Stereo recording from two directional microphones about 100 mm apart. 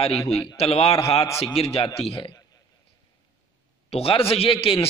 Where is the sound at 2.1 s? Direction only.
55° left (ahead or behind).